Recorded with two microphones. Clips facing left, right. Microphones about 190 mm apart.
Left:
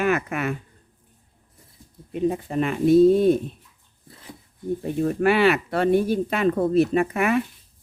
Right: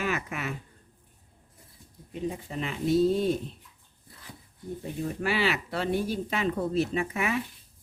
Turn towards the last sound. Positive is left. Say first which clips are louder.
# left 8 dB
turn(degrees=55)  # may be behind; listen again after turning